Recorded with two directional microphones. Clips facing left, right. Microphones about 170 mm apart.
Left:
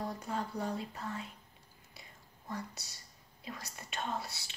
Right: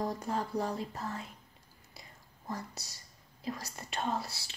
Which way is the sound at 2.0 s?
35° right (ahead or behind).